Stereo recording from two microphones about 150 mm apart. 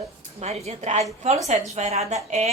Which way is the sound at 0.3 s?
45° right (ahead or behind).